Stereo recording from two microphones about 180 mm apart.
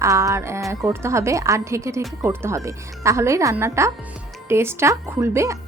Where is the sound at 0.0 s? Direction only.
15° right (ahead or behind).